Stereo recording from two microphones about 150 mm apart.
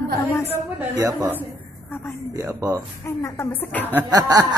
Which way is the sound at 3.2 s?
15° left (ahead or behind).